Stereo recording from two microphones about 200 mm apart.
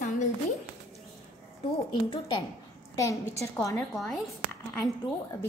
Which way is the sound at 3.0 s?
15° left (ahead or behind).